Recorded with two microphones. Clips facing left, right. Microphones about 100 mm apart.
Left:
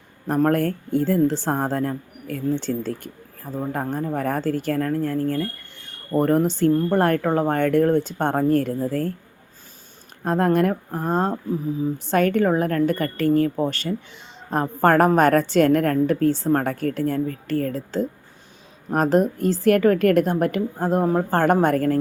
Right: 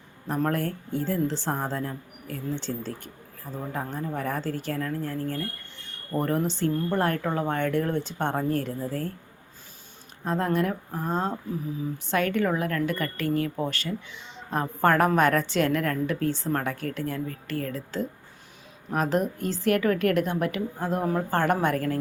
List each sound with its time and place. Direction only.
0.3 s speech: 50° left (ahead or behind)
10.2 s a woman's voice: 55° left (ahead or behind)